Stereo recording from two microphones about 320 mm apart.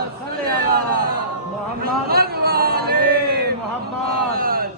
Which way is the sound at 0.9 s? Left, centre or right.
Right.